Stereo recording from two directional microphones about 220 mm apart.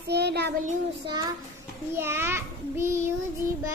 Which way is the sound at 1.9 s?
10° right (ahead or behind).